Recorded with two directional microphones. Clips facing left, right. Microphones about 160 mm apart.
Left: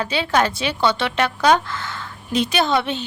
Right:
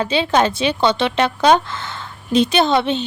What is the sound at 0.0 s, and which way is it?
A woman's voice, 25° right (ahead or behind).